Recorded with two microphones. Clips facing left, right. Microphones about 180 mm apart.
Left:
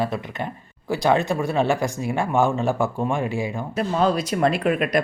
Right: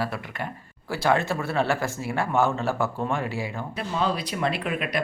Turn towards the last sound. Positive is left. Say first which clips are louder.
# left 7 dB
turn(degrees=45)  # may be behind; listen again after turning